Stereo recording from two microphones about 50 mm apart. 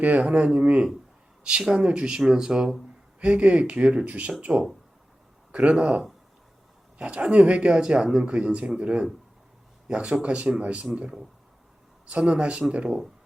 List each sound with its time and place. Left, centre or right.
0.2 s speech: right
3.2 s speech: right
5.5 s a sound: right
7.0 s speech: right
12.0 s speech: right